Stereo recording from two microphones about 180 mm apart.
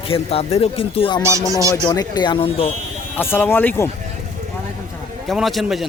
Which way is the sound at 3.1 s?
10° left (ahead or behind).